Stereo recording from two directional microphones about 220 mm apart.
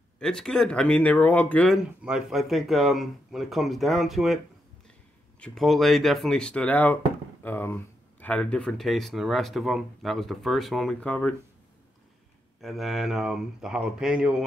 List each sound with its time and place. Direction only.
0.2 s speech: 5° left (ahead or behind)
5.4 s speech: centre (ahead or behind)
12.5 s speech: centre (ahead or behind)